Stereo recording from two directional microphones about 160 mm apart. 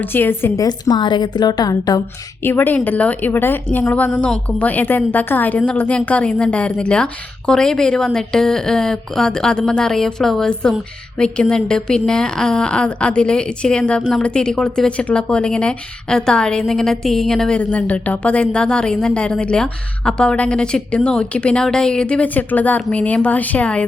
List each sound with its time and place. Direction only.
0.0 s a woman's voice: 15° left (ahead or behind)
2.4 s a woman's voice: 15° left (ahead or behind)